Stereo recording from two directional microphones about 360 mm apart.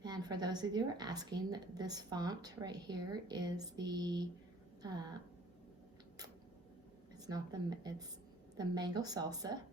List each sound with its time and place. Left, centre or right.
0.0 s a woman's voice: centre
7.2 s a woman's voice: centre